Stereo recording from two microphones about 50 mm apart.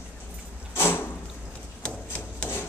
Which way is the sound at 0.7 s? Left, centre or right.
Left.